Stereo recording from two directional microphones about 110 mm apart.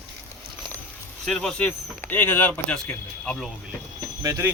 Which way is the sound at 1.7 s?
15° left (ahead or behind).